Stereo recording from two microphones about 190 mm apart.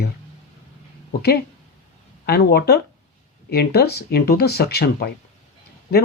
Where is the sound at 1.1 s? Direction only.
55° left (ahead or behind).